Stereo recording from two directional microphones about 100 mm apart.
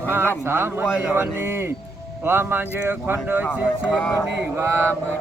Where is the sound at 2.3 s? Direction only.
25° right (ahead or behind).